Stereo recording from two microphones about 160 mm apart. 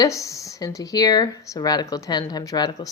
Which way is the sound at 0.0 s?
20° left (ahead or behind).